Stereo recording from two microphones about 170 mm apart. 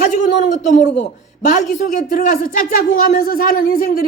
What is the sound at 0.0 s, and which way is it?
Speech, 45° left (ahead or behind).